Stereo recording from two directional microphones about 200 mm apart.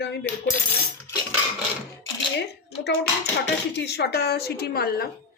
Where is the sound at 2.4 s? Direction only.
55° left (ahead or behind).